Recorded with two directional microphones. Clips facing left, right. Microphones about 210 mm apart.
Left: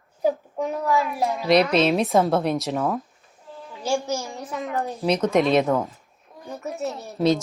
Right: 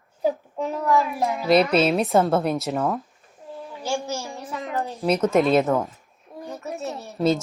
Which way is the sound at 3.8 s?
15° left (ahead or behind).